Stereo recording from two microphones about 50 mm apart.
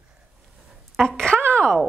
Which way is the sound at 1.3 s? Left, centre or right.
Right.